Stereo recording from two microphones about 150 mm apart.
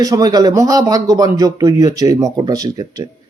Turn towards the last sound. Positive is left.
turn(degrees=-25)  # may be behind; listen again after turning